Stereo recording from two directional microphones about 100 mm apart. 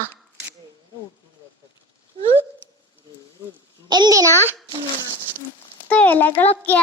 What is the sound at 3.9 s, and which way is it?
Speech, 40° right (ahead or behind).